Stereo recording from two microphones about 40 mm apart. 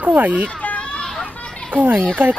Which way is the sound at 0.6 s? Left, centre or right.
Left.